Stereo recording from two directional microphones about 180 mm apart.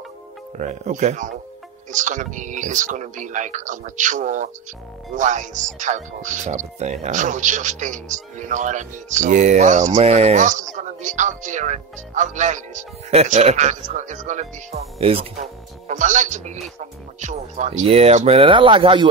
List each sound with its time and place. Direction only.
0.6 s speech: 45° right (ahead or behind)